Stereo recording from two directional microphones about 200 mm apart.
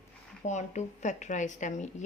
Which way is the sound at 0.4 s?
35° left (ahead or behind).